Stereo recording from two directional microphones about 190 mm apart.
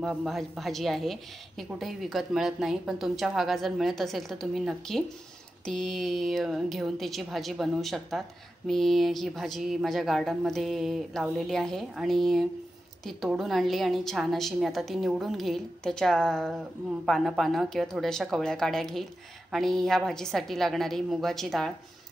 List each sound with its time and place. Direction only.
0.0 s a woman's voice: centre (ahead or behind)